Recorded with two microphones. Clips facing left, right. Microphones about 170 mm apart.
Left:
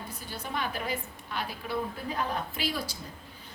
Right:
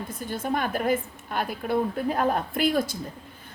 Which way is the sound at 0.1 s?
50° right (ahead or behind).